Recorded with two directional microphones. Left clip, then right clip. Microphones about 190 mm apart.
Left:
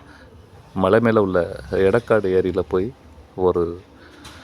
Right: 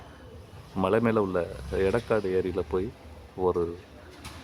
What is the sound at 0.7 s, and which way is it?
Speech, 30° left (ahead or behind).